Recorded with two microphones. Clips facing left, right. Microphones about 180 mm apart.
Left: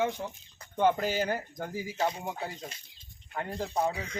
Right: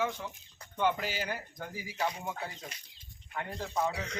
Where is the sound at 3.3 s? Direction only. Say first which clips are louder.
Left 3 dB; 35° left (ahead or behind).